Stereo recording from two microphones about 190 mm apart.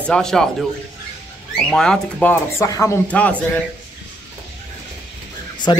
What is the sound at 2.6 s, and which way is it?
Speech, 15° left (ahead or behind).